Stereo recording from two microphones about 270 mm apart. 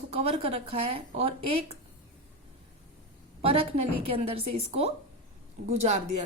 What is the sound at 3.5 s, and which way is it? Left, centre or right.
Speech, right.